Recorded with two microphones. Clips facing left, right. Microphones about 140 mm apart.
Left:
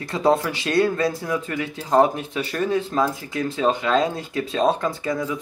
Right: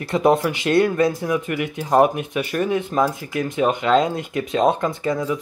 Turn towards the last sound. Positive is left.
turn(degrees=-20)  # may be behind; listen again after turning